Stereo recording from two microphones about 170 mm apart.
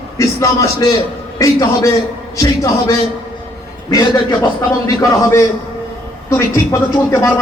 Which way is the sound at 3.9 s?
20° left (ahead or behind).